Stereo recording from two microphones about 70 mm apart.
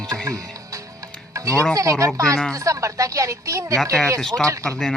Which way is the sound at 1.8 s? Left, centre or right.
Right.